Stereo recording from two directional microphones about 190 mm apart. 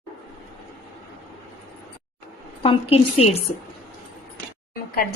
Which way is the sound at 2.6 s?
30° left (ahead or behind).